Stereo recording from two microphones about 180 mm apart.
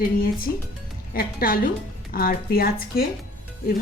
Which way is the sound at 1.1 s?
55° left (ahead or behind).